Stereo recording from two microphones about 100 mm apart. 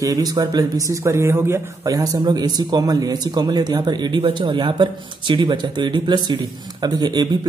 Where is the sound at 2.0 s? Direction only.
40° right (ahead or behind).